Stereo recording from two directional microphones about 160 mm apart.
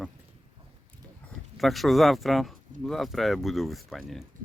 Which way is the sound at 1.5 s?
Centre (ahead or behind).